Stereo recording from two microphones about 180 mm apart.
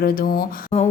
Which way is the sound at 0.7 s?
35° left (ahead or behind).